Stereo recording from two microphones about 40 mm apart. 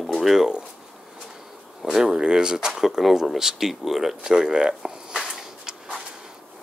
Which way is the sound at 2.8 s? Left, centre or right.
Centre.